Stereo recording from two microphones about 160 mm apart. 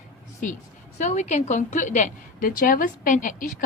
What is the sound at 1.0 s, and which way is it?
A woman's voice, 45° left (ahead or behind).